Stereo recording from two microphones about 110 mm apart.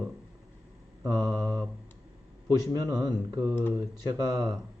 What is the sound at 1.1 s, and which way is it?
Speech, 35° right (ahead or behind).